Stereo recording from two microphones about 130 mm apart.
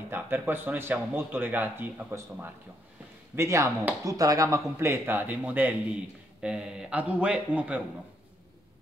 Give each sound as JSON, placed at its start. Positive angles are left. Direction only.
{"t": 0.1, "sound": "speech", "side_deg": -15}